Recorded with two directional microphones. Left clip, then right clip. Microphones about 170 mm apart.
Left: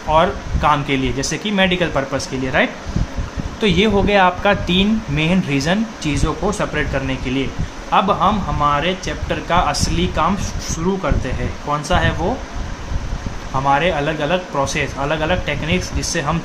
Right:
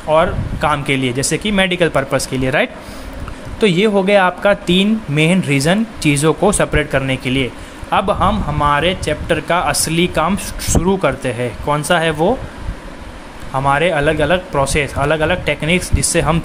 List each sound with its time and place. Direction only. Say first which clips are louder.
0.1 s speech: right 1 dB; 40° right (ahead or behind)
3.5 s a man's voice: right 3 dB; 30° right (ahead or behind); by 12.2 s 50° right (ahead or behind)
13.7 s a man's voice: right 3 dB; 45° right (ahead or behind)